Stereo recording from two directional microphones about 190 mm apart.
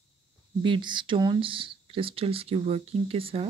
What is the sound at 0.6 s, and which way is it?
Speech, 25° right (ahead or behind).